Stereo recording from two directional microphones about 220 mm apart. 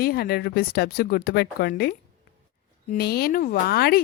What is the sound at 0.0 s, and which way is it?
Speech, 45° left (ahead or behind).